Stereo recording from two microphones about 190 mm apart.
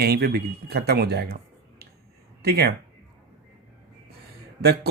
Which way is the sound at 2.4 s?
55° right (ahead or behind).